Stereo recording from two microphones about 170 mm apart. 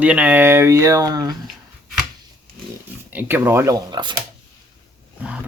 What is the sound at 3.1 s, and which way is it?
Speech, 10° right (ahead or behind).